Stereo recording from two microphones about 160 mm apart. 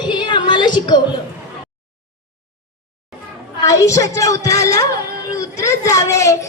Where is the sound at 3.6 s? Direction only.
20° left (ahead or behind).